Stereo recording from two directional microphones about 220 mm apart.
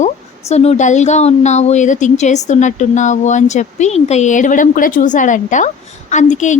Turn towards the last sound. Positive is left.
turn(degrees=35)  # may be behind; listen again after turning